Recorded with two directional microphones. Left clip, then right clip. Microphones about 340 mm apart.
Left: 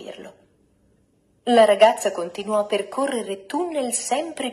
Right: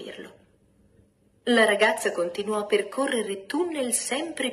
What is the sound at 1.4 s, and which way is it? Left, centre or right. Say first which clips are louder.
A woman's voice: left 6 dB; centre.